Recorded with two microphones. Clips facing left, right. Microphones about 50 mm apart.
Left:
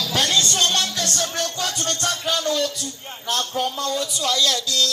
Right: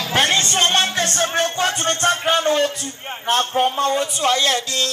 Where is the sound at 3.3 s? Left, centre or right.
Right.